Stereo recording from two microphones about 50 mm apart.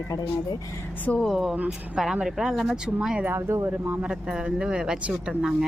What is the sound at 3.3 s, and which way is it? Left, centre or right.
Speech, right.